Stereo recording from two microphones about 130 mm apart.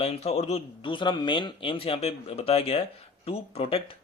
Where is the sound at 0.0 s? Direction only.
50° left (ahead or behind).